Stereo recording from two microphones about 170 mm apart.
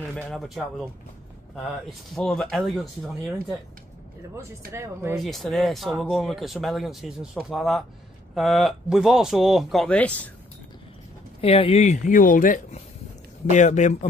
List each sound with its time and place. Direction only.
0.3 s speech: centre (ahead or behind)
2.1 s speech: centre (ahead or behind)
4.7 s speech: 15° right (ahead or behind)
5.1 s speech: centre (ahead or behind)
11.4 s speech: 35° left (ahead or behind)